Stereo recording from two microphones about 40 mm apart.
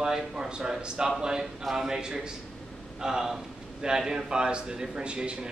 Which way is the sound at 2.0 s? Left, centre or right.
Centre.